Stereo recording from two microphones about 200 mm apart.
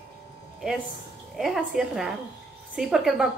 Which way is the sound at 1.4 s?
Centre (ahead or behind).